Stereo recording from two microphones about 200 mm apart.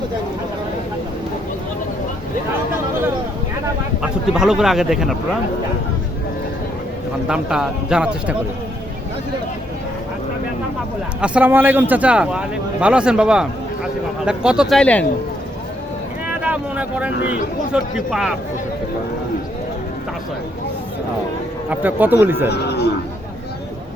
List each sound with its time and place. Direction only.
4.0 s a man's voice: 5° right (ahead or behind)
7.3 s a man's voice: 5° right (ahead or behind)
11.2 s a man's voice: 5° right (ahead or behind)
16.2 s a sound: 5° right (ahead or behind)
17.9 s a man's voice: centre (ahead or behind)
21.7 s speech: 10° right (ahead or behind)
22.4 s speech: 55° left (ahead or behind)